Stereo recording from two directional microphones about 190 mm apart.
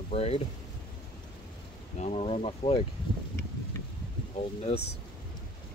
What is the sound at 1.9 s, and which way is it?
Speech, 35° left (ahead or behind).